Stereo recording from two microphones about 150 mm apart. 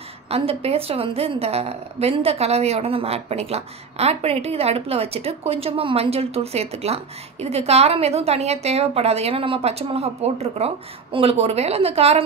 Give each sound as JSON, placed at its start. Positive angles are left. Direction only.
{"t": 0.3, "sound": "a woman's voice", "side_deg": -40}